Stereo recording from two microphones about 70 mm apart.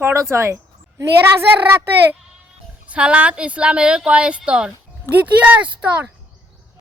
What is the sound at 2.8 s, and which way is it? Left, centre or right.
Speech, centre.